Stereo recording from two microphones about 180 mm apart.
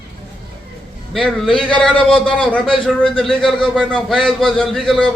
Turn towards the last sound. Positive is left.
turn(degrees=5)  # may be behind; listen again after turning